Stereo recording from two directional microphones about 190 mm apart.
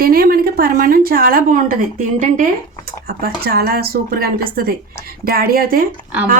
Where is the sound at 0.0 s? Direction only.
50° right (ahead or behind).